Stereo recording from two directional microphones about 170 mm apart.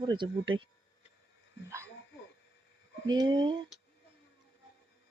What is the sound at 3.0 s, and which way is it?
Speech, 25° right (ahead or behind).